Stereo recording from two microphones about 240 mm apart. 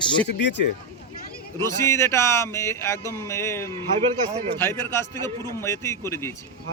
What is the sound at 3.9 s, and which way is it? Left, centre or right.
Speech, right.